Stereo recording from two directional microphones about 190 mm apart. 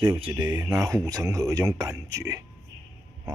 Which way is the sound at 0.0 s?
30° right (ahead or behind).